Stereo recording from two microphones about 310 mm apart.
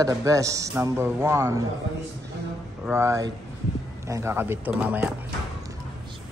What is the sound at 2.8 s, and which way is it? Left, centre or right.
Speech, centre.